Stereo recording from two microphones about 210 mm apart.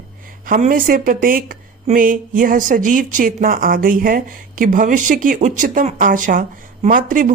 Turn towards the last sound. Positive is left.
turn(degrees=-40)  # may be behind; listen again after turning